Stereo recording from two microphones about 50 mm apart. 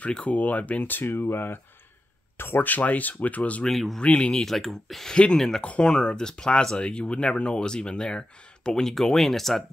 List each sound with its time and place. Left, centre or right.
0.2 s speech: left
1.0 s speech: left
4.0 s speech: centre
5.1 s speech: centre